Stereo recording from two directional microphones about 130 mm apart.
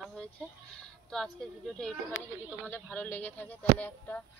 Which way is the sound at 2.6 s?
10° left (ahead or behind).